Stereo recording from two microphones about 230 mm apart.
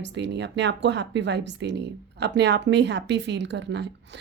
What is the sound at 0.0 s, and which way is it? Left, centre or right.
Speech, right.